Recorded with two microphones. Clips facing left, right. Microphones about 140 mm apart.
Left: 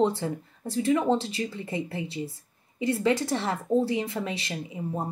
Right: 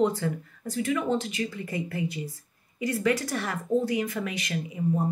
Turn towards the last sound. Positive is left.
turn(degrees=30)  # may be behind; listen again after turning